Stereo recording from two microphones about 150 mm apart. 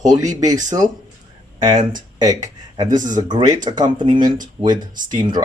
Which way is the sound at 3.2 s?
30° right (ahead or behind).